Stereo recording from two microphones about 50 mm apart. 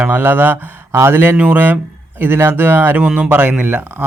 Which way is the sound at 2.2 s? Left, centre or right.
Right.